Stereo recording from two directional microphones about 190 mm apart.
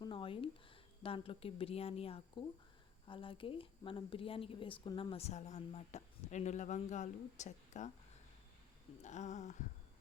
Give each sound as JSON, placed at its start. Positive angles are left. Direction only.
{"t": 0.0, "sound": "a sound", "side_deg": 25}
{"t": 1.0, "sound": "a woman's voice", "side_deg": 30}
{"t": 9.0, "sound": "a woman's voice", "side_deg": 40}